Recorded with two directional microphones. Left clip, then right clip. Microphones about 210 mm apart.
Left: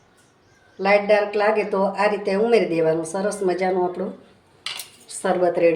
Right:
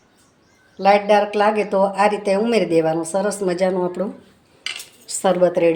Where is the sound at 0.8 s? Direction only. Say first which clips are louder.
Right 3 dB; 40° right (ahead or behind).